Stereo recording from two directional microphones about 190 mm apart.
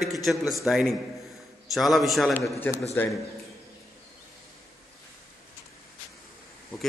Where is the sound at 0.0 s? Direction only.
Centre (ahead or behind).